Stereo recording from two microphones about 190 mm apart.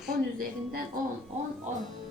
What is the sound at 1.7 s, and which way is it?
Speech, 40° right (ahead or behind).